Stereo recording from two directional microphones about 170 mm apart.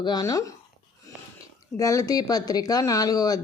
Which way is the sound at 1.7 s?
20° left (ahead or behind).